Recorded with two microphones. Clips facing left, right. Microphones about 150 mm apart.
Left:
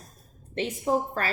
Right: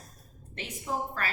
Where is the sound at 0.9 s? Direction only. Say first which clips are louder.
Left 8 dB; 35° left (ahead or behind).